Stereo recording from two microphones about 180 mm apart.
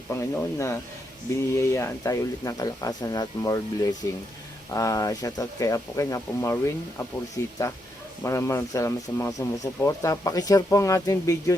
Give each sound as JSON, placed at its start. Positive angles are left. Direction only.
{"t": 0.1, "sound": "speech", "side_deg": 15}